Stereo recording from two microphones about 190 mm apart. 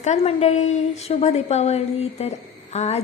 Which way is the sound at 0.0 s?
35° left (ahead or behind).